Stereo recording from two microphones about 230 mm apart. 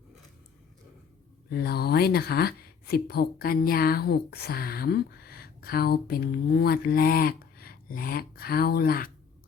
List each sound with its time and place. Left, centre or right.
1.5 s speech: left